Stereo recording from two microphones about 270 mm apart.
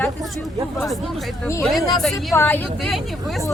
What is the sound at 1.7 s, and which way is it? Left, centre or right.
Speech, centre.